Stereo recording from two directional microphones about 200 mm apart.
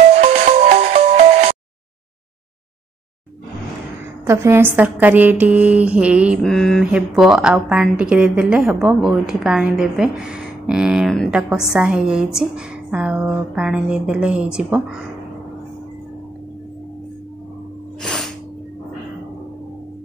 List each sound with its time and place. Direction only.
0.2 s music: 35° right (ahead or behind)
4.3 s a woman's voice: 15° right (ahead or behind)
18.0 s music: centre (ahead or behind)